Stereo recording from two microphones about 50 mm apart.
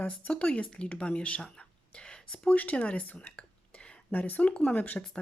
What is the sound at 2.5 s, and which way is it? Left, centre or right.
A woman's voice, left.